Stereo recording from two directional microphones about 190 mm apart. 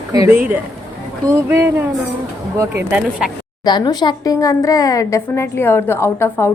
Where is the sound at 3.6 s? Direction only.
20° left (ahead or behind).